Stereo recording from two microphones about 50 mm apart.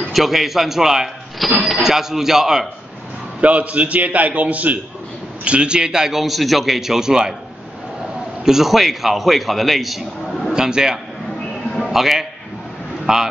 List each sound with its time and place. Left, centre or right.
0.1 s a man's voice: centre
3.3 s a man's voice: right; by 7.3 s centre
8.5 s a man's voice: centre
10.5 s a man's voice: centre